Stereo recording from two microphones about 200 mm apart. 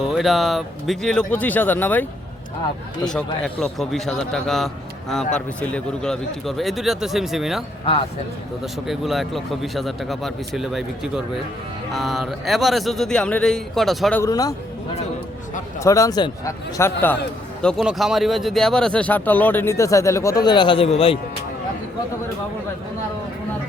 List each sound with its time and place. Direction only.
0.1 s a man's voice: centre (ahead or behind)
3.4 s a man's voice: centre (ahead or behind)
8.6 s a man's voice: centre (ahead or behind)
14.2 s speech: 20° left (ahead or behind)
15.8 s speech: 15° left (ahead or behind)